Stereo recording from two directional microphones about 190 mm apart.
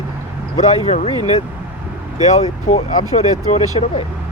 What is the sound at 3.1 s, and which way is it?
Speech, 35° left (ahead or behind).